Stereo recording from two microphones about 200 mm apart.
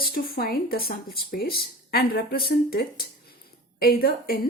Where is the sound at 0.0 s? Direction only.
50° left (ahead or behind).